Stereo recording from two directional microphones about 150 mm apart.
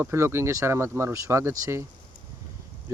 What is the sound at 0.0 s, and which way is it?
Speech, 15° right (ahead or behind).